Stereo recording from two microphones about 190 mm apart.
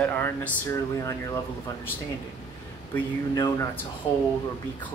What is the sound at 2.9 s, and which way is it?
Speech, 15° left (ahead or behind).